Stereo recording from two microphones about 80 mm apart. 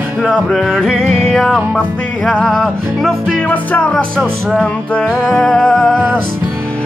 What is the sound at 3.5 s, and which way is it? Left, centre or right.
Music, centre.